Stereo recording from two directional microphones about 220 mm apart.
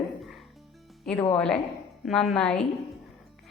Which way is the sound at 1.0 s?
10° left (ahead or behind).